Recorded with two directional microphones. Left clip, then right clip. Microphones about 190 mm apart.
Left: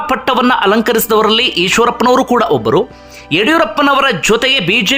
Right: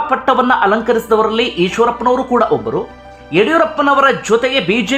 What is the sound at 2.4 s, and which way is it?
A man's voice, 20° left (ahead or behind).